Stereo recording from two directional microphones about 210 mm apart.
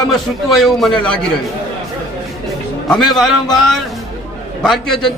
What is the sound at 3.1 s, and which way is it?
A man's voice, centre (ahead or behind).